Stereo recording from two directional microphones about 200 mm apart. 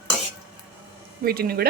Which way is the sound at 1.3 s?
50° right (ahead or behind).